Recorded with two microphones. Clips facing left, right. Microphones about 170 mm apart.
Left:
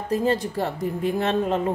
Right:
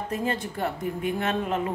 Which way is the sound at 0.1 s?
35° left (ahead or behind).